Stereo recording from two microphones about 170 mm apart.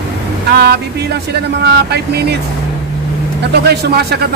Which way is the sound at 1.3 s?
75° right (ahead or behind).